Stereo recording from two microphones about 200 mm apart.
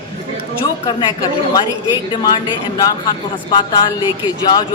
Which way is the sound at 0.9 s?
20° left (ahead or behind).